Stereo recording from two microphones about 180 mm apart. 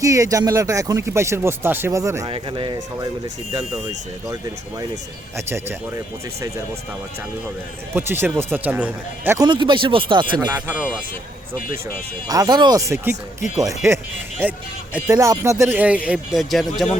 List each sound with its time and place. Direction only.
0.0 s speech: 20° right (ahead or behind)
2.3 s speech: 30° right (ahead or behind)
5.5 s speech: 15° right (ahead or behind)
7.9 s speech: 10° right (ahead or behind)
12.3 s speech: 20° right (ahead or behind); by 16.9 s centre (ahead or behind)